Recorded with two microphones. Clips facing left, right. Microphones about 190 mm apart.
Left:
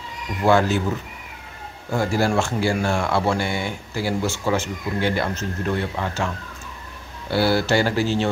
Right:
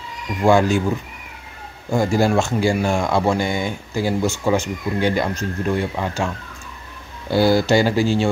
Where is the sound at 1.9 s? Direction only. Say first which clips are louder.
Right 3 dB; 15° right (ahead or behind).